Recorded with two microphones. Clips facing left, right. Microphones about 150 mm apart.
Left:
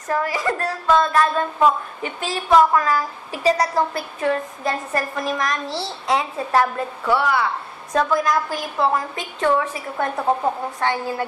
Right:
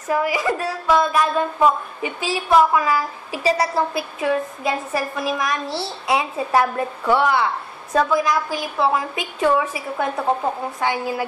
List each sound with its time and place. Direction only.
0.1 s a woman's voice: 10° right (ahead or behind)
7.9 s a woman's voice: 5° right (ahead or behind)